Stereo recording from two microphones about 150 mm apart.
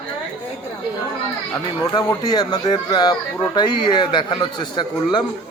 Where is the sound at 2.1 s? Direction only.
25° left (ahead or behind).